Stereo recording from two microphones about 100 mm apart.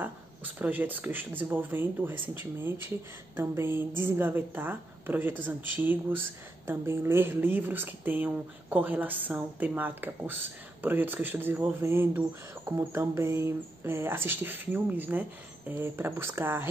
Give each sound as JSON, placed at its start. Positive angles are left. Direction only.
{"t": 0.0, "sound": "speech", "side_deg": -15}